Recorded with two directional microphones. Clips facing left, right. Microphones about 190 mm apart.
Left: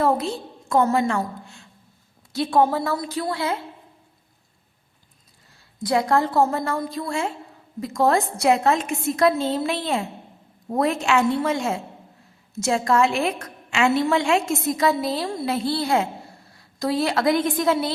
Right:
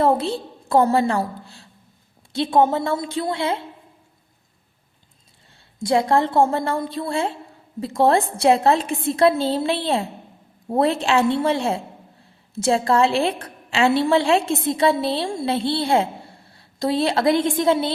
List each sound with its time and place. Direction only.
0.0 s a woman's voice: 30° right (ahead or behind)
5.5 s a woman's voice: 25° right (ahead or behind)